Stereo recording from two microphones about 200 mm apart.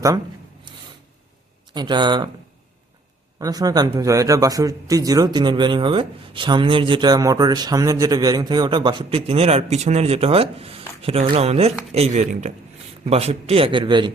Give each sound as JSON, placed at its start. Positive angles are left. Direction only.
{"t": 1.7, "sound": "speech", "side_deg": -20}
{"t": 3.3, "sound": "speech", "side_deg": -20}